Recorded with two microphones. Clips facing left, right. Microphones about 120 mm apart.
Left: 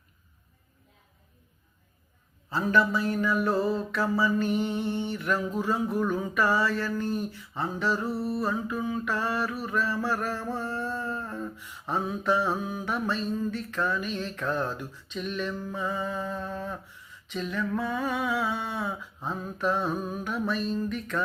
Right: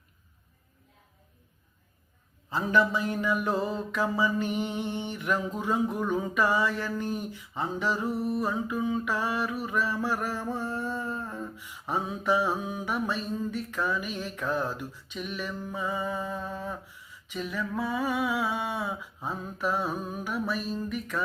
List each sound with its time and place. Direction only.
2.5 s mantra: 15° right (ahead or behind)